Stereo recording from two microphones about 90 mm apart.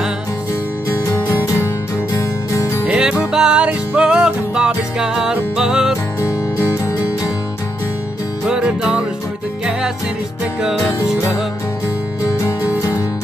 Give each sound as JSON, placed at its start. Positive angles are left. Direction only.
{"t": 0.8, "sound": "music", "side_deg": 30}
{"t": 2.8, "sound": "music", "side_deg": -10}
{"t": 8.5, "sound": "music", "side_deg": -10}
{"t": 10.4, "sound": "music", "side_deg": -5}
{"t": 12.4, "sound": "music", "side_deg": 40}